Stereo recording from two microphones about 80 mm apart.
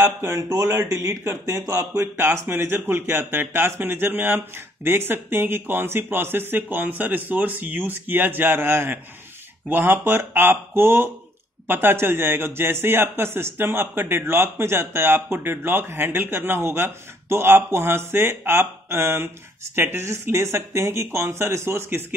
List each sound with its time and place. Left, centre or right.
0.0 s a man's voice: right